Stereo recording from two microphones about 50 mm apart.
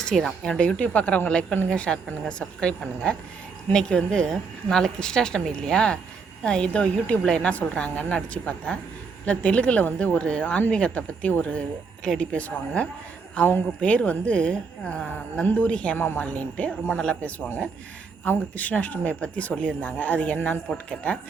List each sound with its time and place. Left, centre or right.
0.0 s a woman's voice: centre
0.8 s a woman's voice: left
12.0 s a woman's voice: centre
16.0 s a woman's voice: left
16.2 s a woman's voice: left
18.3 s speech: left